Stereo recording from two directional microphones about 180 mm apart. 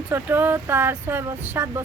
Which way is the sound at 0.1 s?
10° right (ahead or behind).